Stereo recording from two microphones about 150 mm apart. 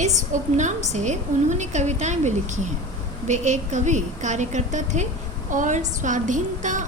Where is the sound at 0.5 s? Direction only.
50° right (ahead or behind).